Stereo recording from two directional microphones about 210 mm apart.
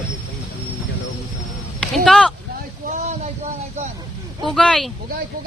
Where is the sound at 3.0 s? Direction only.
35° right (ahead or behind).